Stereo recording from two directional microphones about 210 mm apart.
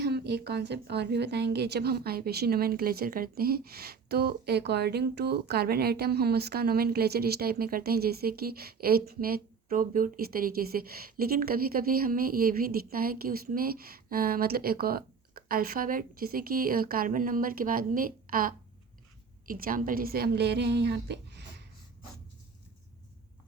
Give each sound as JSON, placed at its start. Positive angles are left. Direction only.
{"t": 0.0, "sound": "a woman's voice", "side_deg": -50}